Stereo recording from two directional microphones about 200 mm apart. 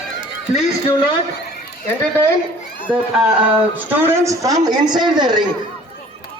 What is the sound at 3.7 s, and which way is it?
A man's voice, 10° right (ahead or behind).